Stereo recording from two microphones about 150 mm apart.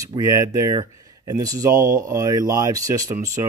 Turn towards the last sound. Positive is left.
turn(degrees=-25)  # may be behind; listen again after turning